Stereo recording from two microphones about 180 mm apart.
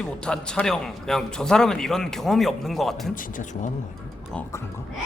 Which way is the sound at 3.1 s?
45° left (ahead or behind).